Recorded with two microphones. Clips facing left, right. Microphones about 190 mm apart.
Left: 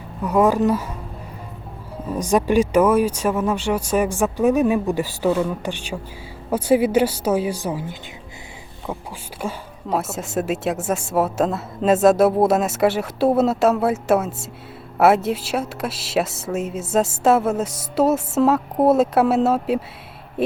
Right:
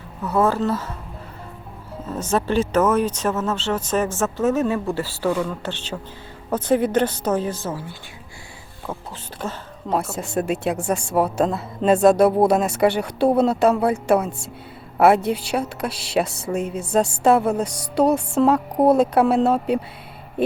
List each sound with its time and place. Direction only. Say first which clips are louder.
0.2 s speech: left 3 dB; 15° left (ahead or behind)
2.0 s speech: left 3 dB; 15° left (ahead or behind)
9.4 s a woman's voice: left 2 dB; 5° left (ahead or behind)